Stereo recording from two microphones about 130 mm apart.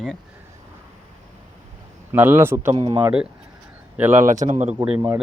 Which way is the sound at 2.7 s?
40° right (ahead or behind).